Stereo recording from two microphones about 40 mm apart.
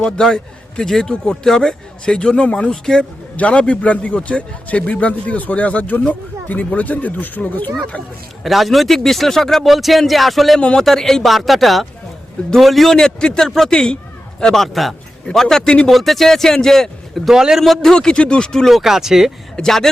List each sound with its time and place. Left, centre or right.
0.0 s speech: centre
1.1 s speech: left
3.0 s a man's voice: left
8.4 s a man's voice: centre
14.5 s a man's voice: centre
15.9 s speech: centre
17.2 s speech: centre
17.6 s a man's voice: centre
18.1 s speech: left
18.7 s speech: centre
19.6 s speech: centre